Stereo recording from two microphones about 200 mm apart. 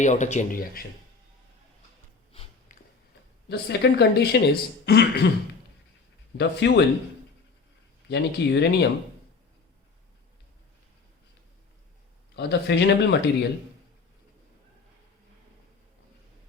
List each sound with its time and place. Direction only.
0.0 s speech: 35° left (ahead or behind)
2.7 s a sound: 40° left (ahead or behind)
3.5 s speech: 55° left (ahead or behind)
6.3 s speech: 60° left (ahead or behind)
8.1 s speech: 60° left (ahead or behind)
12.4 s speech: 60° left (ahead or behind)